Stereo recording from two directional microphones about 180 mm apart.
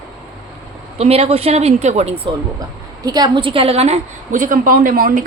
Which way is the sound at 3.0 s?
20° right (ahead or behind).